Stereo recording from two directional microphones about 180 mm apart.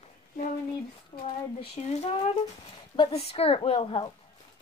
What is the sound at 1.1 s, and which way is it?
A woman's voice, 40° left (ahead or behind).